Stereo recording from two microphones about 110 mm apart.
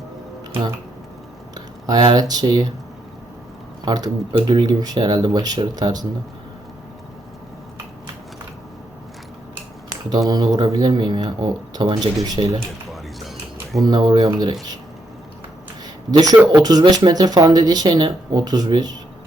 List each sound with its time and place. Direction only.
1.5 s a sound: 35° right (ahead or behind)
2.1 s speech: 35° right (ahead or behind)
3.8 s speech: 35° right (ahead or behind)
10.1 s speech: 35° right (ahead or behind)
12.4 s speech: 50° right (ahead or behind)
12.9 s music: centre (ahead or behind)
13.8 s speech: 40° right (ahead or behind)
16.1 s speech: 35° right (ahead or behind)